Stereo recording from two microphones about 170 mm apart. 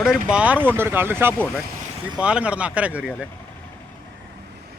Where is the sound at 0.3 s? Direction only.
5° right (ahead or behind).